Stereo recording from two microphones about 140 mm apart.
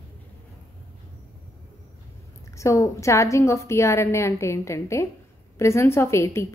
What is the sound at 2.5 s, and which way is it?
A woman's voice, 20° left (ahead or behind).